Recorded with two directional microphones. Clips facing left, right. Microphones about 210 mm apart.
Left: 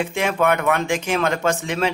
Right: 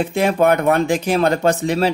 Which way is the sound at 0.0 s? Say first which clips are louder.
Right 4 dB; 35° right (ahead or behind).